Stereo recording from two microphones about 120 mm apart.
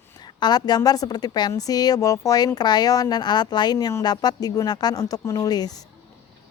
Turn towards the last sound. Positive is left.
turn(degrees=35)  # may be behind; listen again after turning